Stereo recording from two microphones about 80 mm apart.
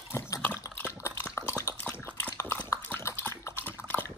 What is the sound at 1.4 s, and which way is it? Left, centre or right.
Dog, left.